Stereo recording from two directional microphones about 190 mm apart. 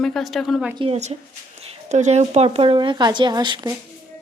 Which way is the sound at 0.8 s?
35° right (ahead or behind).